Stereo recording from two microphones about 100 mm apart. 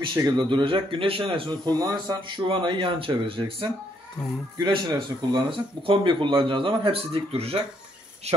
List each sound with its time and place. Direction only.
0.0 s speech: 45° right (ahead or behind)
1.7 s speech: 40° right (ahead or behind); by 7.6 s 80° right